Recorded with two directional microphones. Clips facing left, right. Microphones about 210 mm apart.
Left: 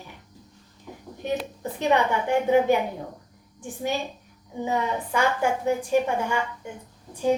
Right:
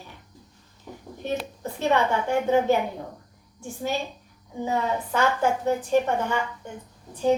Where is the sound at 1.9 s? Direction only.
15° left (ahead or behind).